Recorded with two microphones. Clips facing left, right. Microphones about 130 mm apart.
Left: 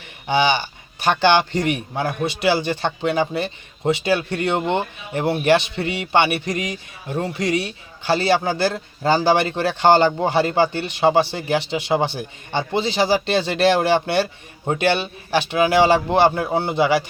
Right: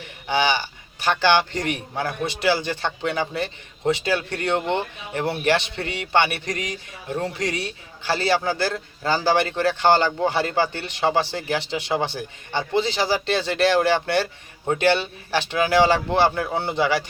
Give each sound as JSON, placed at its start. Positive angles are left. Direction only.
{"t": 0.3, "sound": "a man's voice", "side_deg": 20}
{"t": 16.3, "sound": "a man's voice", "side_deg": 30}
{"t": 16.7, "sound": "a man's voice", "side_deg": 10}